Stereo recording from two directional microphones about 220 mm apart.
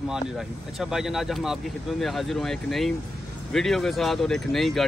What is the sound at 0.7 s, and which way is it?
Speech, centre (ahead or behind).